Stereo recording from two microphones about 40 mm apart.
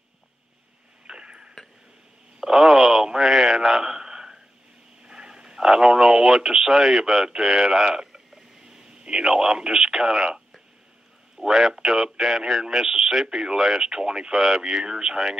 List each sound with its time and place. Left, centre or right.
1.0 s tick-tock: right
2.4 s speech: centre
3.1 s a sound: centre
5.0 s speech: centre
11.4 s speech: centre